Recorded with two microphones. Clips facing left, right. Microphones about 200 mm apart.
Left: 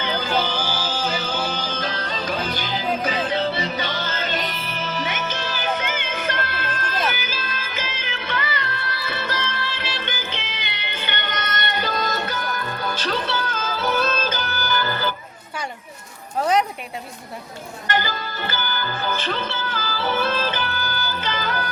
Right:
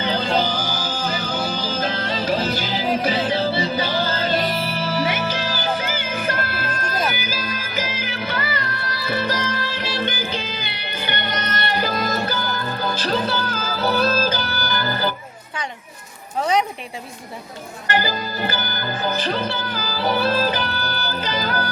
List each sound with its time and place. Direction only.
0.0 s music: 30° right (ahead or behind)
16.4 s speech: centre (ahead or behind)
17.8 s music: 35° right (ahead or behind)